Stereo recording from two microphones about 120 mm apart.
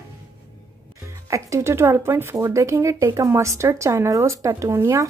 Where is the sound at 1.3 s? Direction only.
25° right (ahead or behind).